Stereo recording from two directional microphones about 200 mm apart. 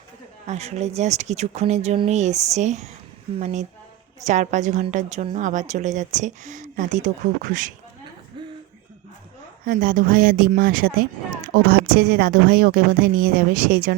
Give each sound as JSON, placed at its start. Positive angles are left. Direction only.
{"t": 0.4, "sound": "a woman's voice", "side_deg": -35}
{"t": 8.4, "sound": "throat clearing", "side_deg": -25}
{"t": 9.6, "sound": "speech", "side_deg": -40}